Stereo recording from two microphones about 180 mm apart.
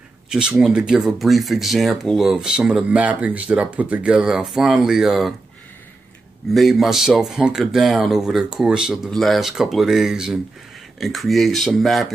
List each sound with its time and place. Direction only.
0.3 s speech: 5° right (ahead or behind)
6.5 s speech: centre (ahead or behind)